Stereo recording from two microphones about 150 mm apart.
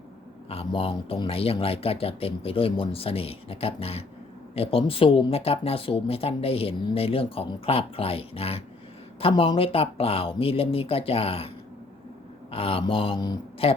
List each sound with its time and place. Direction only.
0.5 s speech: 40° left (ahead or behind)